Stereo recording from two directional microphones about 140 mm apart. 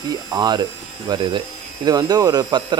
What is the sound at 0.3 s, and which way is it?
Speech, 30° right (ahead or behind).